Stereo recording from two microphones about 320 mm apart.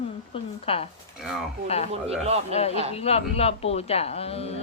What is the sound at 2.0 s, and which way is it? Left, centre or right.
Speech, centre.